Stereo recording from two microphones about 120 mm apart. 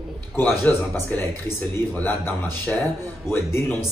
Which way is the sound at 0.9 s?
20° left (ahead or behind).